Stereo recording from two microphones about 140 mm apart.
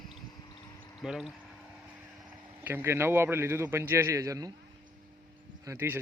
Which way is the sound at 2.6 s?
15° right (ahead or behind).